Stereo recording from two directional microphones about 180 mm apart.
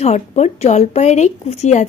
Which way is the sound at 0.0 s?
35° left (ahead or behind).